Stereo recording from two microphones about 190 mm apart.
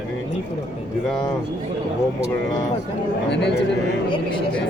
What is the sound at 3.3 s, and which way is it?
Speech, 65° left (ahead or behind).